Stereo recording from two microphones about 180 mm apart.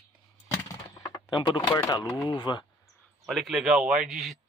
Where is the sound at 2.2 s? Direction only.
25° left (ahead or behind).